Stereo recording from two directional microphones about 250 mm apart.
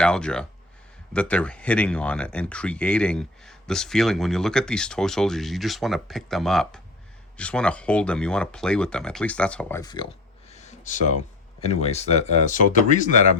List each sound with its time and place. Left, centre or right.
0.0 s speech: centre
10.5 s a sound: left
11.6 s speech: left